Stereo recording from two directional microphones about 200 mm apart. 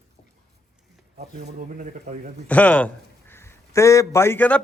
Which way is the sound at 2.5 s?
5° left (ahead or behind).